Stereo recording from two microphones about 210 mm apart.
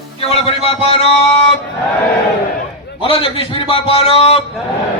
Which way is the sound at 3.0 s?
25° left (ahead or behind).